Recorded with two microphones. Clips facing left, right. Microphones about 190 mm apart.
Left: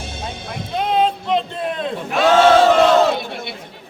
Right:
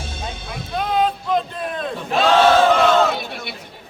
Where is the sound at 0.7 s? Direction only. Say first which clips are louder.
Left 2 dB; 25° left (ahead or behind).